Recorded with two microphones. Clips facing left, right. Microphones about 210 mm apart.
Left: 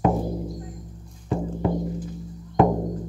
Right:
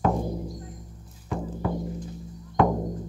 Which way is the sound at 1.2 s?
25° left (ahead or behind).